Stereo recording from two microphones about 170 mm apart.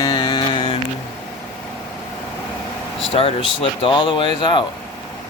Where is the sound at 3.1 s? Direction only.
35° left (ahead or behind).